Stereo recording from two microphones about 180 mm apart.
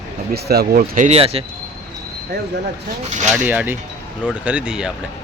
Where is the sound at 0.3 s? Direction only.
60° right (ahead or behind); by 1.5 s 35° right (ahead or behind).